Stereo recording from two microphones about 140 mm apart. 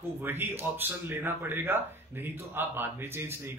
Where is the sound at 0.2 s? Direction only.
15° right (ahead or behind).